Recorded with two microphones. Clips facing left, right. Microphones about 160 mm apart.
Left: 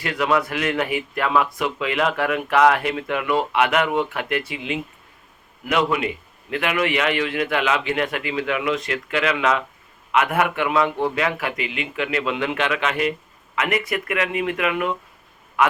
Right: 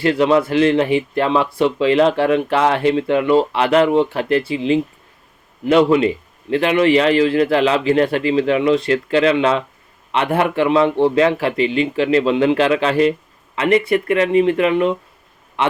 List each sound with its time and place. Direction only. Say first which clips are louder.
0.0 s a man's voice: right 7 dB; 30° right (ahead or behind)